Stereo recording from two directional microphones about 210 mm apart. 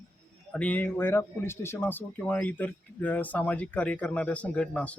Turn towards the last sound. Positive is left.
turn(degrees=5)  # may be behind; listen again after turning